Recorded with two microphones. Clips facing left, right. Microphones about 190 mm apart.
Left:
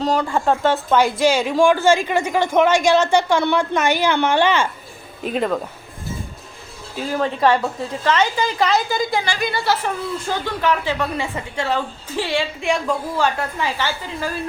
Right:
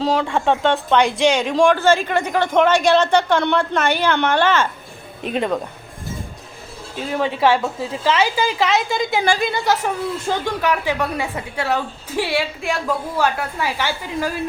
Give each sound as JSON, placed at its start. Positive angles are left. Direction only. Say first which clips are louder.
{"t": 0.0, "sound": "speech", "louder": "even", "side_deg": 0}
{"t": 5.2, "sound": "a woman's voice", "louder": "even", "side_deg": 0}
{"t": 6.9, "sound": "a woman's voice", "louder": "even", "side_deg": 0}
{"t": 9.4, "sound": "a woman's voice", "louder": "right 1 dB", "side_deg": -20}